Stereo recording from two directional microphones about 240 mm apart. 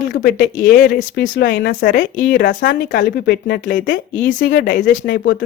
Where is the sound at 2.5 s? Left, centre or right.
Left.